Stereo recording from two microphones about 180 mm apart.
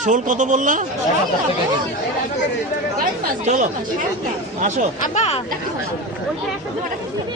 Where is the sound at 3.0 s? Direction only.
45° right (ahead or behind).